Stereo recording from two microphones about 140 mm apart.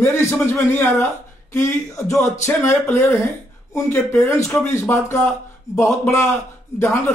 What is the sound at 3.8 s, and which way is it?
Speech, 15° left (ahead or behind).